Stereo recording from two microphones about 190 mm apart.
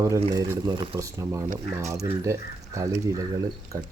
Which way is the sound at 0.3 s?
20° right (ahead or behind).